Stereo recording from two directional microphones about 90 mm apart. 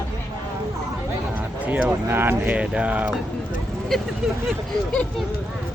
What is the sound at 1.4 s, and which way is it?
Speech, 15° right (ahead or behind).